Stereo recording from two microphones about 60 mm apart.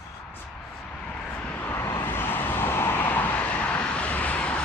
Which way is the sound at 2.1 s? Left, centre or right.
Left.